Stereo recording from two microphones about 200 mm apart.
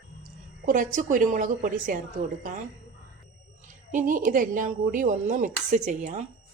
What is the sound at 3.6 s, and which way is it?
A woman's voice, 40° right (ahead or behind).